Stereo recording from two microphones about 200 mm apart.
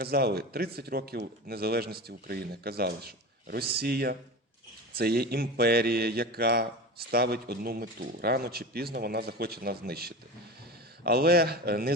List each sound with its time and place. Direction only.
0.0 s speech: 50° right (ahead or behind)